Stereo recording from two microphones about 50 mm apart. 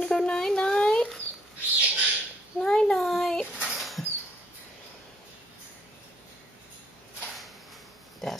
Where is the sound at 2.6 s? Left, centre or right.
Centre.